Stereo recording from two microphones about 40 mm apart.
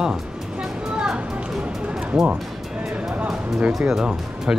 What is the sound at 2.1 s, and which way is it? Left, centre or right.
Speech, right.